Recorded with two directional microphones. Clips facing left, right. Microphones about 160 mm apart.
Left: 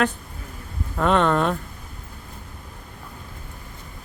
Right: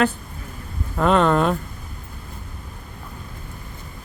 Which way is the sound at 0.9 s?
5° right (ahead or behind).